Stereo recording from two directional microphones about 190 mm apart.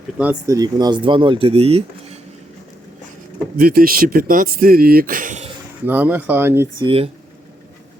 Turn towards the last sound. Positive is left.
turn(degrees=-30)  # may be behind; listen again after turning